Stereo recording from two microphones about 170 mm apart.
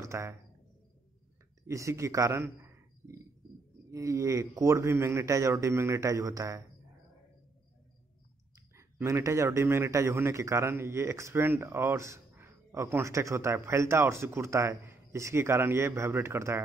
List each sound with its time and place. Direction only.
0.0 s speech: 15° right (ahead or behind)
1.7 s a man's voice: 20° right (ahead or behind)
8.7 s a man's voice: 15° right (ahead or behind)